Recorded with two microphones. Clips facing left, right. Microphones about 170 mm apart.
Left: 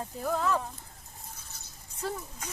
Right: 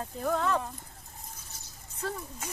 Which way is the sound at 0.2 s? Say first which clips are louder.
Right 1 dB; centre (ahead or behind).